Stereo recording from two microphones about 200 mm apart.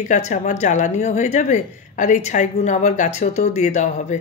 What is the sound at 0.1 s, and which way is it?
A woman's voice, 35° left (ahead or behind).